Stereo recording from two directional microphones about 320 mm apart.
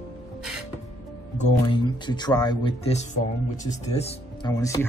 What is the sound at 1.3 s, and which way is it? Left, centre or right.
Speech, centre.